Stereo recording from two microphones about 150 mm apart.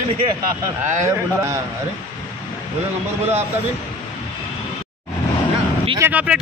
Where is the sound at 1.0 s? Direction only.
20° right (ahead or behind).